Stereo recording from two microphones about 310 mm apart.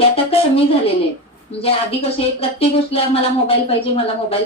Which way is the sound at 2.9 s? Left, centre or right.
Centre.